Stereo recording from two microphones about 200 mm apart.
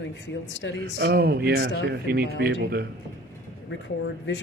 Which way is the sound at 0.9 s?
50° right (ahead or behind).